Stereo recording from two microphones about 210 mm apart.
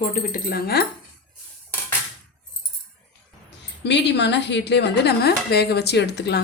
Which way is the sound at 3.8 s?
55° left (ahead or behind).